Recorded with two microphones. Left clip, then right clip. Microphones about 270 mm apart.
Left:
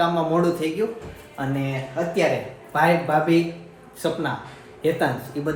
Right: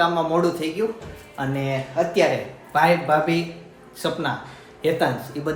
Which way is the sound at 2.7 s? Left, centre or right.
Centre.